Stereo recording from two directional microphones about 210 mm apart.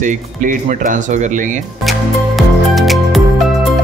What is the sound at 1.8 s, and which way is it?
Music, centre (ahead or behind).